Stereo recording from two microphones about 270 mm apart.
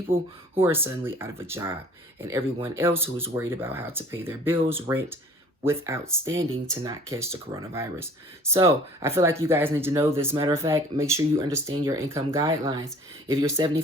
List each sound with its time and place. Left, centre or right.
0.1 s speech: centre